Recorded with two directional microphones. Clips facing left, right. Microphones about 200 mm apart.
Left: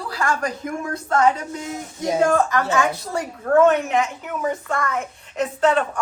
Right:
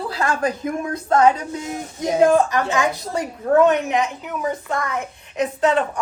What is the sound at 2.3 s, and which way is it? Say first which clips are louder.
A woman's voice: right 1 dB; 15° right (ahead or behind).